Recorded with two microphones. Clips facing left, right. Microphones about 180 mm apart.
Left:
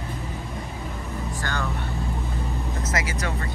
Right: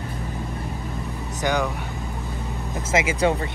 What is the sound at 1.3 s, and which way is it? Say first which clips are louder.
Speech: right 10 dB; 15° right (ahead or behind).